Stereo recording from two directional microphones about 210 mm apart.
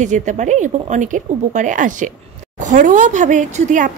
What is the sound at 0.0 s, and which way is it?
Speech, 35° right (ahead or behind).